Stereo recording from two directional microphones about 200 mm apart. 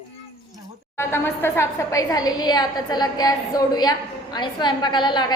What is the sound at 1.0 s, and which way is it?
A woman's voice, 10° left (ahead or behind).